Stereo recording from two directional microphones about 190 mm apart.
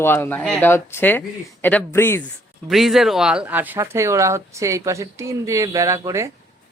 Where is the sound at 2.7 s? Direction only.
Centre (ahead or behind).